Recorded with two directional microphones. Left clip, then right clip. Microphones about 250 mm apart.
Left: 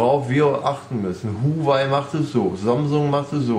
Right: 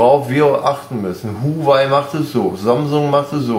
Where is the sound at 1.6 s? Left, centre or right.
Right.